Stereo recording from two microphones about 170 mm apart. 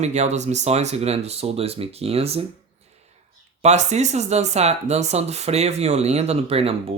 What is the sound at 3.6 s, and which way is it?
Speech, 40° right (ahead or behind).